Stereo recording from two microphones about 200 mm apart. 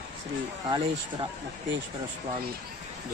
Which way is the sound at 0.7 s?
25° right (ahead or behind).